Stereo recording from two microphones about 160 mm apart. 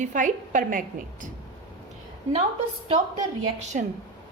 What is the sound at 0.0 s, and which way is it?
A woman's voice, 55° right (ahead or behind).